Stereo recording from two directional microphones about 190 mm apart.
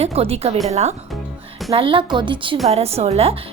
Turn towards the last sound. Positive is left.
turn(degrees=-30)  # may be behind; listen again after turning